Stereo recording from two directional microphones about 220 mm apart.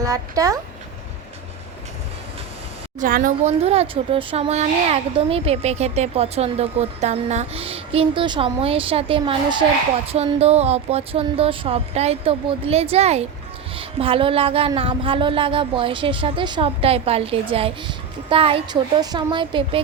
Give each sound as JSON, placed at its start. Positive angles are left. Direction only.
{"t": 0.0, "sound": "speech", "side_deg": -15}
{"t": 3.0, "sound": "speech", "side_deg": -35}